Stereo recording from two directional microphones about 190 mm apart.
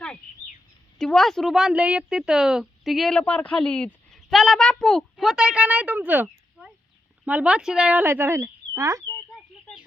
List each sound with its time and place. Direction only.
0.9 s a woman's voice: centre (ahead or behind); by 9.0 s 15° right (ahead or behind)
9.3 s bird: centre (ahead or behind)